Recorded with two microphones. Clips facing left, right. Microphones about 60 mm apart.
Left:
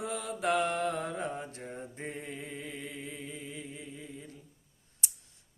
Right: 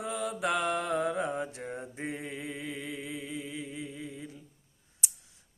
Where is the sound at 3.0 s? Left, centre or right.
Centre.